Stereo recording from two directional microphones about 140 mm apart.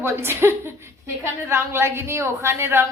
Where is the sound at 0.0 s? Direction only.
15° right (ahead or behind).